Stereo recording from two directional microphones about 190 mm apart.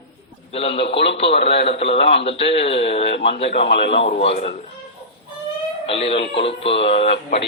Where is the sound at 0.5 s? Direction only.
30° left (ahead or behind).